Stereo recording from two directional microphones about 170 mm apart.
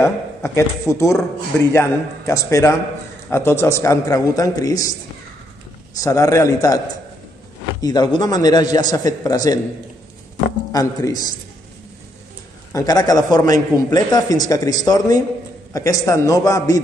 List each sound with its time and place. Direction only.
0.0 s a man's voice: 15° left (ahead or behind)
5.9 s a man's voice: 20° left (ahead or behind)
7.8 s a man's voice: 25° left (ahead or behind)
10.7 s a man's voice: 20° left (ahead or behind)
12.7 s a man's voice: 20° left (ahead or behind)